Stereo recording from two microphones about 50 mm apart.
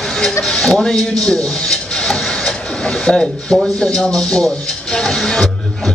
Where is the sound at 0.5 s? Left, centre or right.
Centre.